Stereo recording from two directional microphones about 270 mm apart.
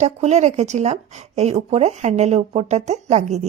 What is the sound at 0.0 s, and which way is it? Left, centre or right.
Speech, right.